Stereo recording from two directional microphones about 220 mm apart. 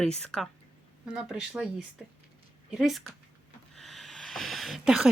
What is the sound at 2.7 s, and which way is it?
Speech, centre (ahead or behind).